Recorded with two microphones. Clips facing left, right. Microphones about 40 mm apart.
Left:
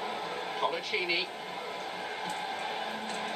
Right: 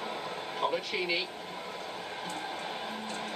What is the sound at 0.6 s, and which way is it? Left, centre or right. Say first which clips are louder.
Speech: right 1 dB; centre.